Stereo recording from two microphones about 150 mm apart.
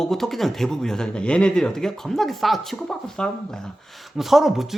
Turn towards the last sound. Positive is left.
turn(degrees=0)  # may be behind; listen again after turning